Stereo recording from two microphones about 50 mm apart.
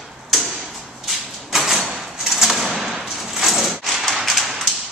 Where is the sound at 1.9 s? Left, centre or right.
Centre.